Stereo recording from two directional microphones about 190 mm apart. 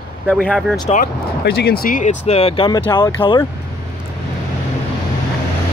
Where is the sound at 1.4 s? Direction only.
55° left (ahead or behind); by 3.4 s 25° left (ahead or behind).